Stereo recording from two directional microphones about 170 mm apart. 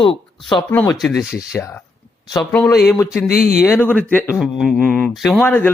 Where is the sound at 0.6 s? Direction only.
5° left (ahead or behind).